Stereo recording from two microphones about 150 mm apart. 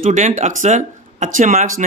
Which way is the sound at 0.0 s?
60° right (ahead or behind).